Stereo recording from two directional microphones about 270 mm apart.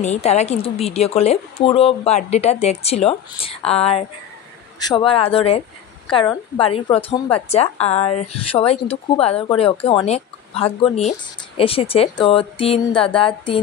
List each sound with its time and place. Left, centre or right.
0.0 s a woman's voice: left